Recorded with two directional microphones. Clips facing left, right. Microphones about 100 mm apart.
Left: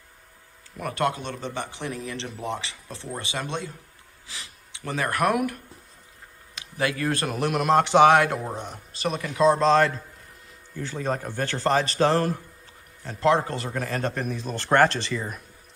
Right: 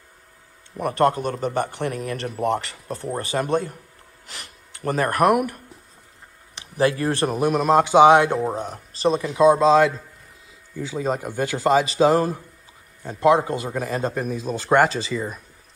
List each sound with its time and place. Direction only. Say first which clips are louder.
0.7 s speech: right 7 dB; 35° right (ahead or behind)
4.7 s speech: right 5 dB; 45° right (ahead or behind)
6.5 s a man's voice: right 7 dB; 30° right (ahead or behind)
7.9 s a man's voice: right 4 dB; 20° right (ahead or behind)
8.5 s speech: right 6 dB; 35° right (ahead or behind)
9.4 s a man's voice: right 4 dB; 10° right (ahead or behind)